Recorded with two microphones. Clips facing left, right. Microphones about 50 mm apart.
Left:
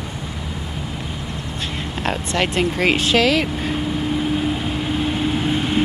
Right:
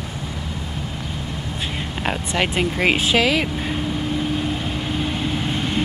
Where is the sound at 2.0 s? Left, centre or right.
Centre.